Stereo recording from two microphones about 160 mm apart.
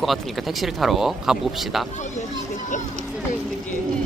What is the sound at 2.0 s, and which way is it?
Speech, 50° left (ahead or behind).